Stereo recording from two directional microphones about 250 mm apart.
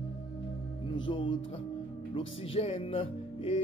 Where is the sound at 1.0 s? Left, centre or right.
Centre.